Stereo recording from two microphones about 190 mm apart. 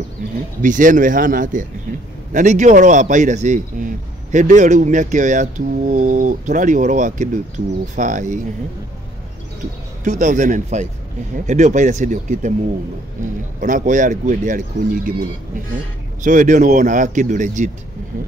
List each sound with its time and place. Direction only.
0.6 s a man's voice: 45° right (ahead or behind)
10.0 s a man's voice: 40° right (ahead or behind)
13.6 s speech: 40° right (ahead or behind)
16.2 s a man's voice: 40° right (ahead or behind)